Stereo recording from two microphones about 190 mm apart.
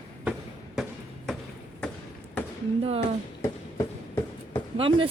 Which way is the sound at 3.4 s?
15° left (ahead or behind).